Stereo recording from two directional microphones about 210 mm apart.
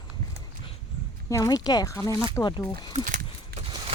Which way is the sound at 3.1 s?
40° right (ahead or behind).